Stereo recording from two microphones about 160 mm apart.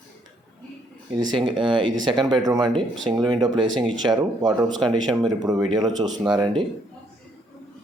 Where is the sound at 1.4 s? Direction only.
30° right (ahead or behind).